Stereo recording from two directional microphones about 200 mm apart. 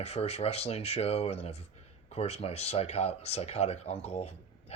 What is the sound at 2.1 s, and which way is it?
Speech, 30° left (ahead or behind).